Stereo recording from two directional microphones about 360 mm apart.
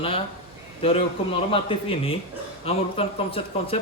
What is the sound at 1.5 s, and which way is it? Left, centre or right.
A man's voice, centre.